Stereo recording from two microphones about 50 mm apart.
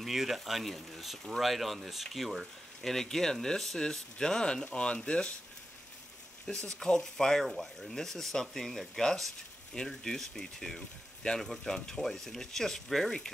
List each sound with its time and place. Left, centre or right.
0.0 s speech: centre
6.5 s speech: centre